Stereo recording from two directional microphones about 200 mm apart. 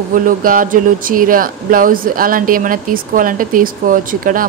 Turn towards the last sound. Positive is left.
turn(degrees=-45)  # may be behind; listen again after turning